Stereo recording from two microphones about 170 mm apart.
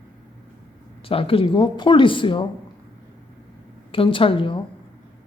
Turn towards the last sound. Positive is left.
turn(degrees=30)  # may be behind; listen again after turning